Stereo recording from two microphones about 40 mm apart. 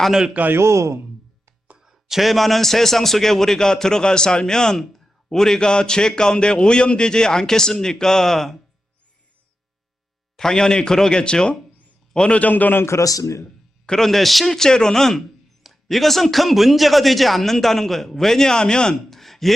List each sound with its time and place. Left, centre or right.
0.4 s a man's voice: right
1.8 s a man's voice: centre
10.3 s a man's voice: centre
12.3 s a man's voice: left
13.4 s a sound: left
14.0 s a man's voice: centre
19.1 s a sound: centre